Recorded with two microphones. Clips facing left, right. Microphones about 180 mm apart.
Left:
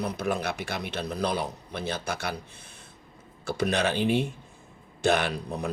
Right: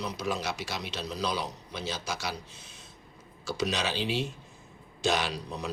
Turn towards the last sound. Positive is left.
turn(degrees=55)  # may be behind; listen again after turning